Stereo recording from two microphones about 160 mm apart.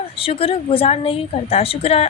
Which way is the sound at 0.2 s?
35° left (ahead or behind).